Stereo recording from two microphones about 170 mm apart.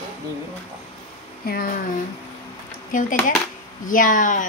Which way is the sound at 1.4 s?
60° left (ahead or behind).